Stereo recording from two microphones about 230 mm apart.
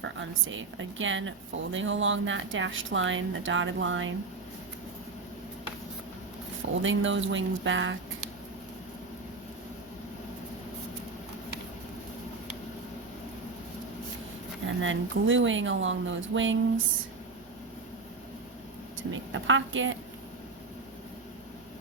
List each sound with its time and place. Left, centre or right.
0.0 s speech: right
6.8 s speech: right
14.8 s speech: right
19.1 s speech: right